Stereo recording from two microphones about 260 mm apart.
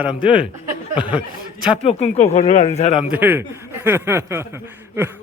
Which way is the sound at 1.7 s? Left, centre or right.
Left.